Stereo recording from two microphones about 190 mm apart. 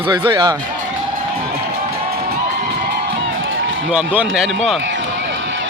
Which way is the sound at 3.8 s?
5° right (ahead or behind).